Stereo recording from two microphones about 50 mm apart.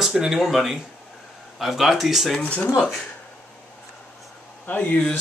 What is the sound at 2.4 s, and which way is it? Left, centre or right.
Speech, left.